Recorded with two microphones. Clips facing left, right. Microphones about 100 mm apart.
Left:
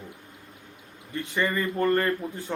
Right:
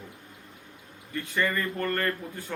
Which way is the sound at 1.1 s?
20° left (ahead or behind).